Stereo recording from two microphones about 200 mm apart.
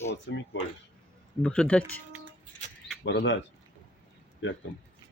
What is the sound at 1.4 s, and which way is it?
Speech, 5° left (ahead or behind).